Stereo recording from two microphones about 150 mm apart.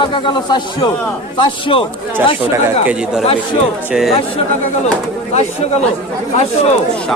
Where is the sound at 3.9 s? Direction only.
Centre (ahead or behind).